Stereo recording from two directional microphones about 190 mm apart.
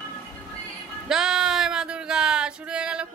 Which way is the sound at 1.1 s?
5° right (ahead or behind).